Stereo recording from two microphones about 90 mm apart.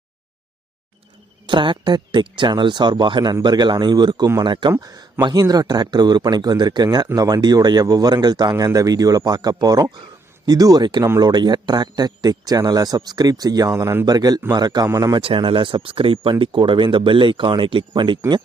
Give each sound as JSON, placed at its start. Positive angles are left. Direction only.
{"t": 1.5, "sound": "speech", "side_deg": -60}
{"t": 4.8, "sound": "speech", "side_deg": -45}
{"t": 15.2, "sound": "speech", "side_deg": -85}
{"t": 16.4, "sound": "speech", "side_deg": -65}